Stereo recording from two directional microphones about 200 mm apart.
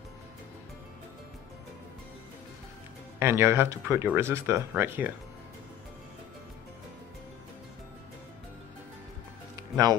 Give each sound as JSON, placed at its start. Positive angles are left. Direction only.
{"t": 3.2, "sound": "speech", "side_deg": -10}
{"t": 9.6, "sound": "music", "side_deg": -20}